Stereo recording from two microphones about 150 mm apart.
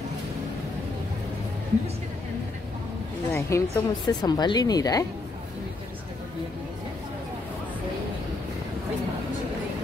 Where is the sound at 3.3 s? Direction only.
20° left (ahead or behind).